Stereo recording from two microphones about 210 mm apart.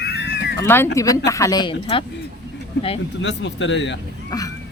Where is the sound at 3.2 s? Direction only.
60° left (ahead or behind).